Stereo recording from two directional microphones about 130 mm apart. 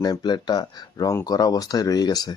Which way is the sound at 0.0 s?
30° left (ahead or behind).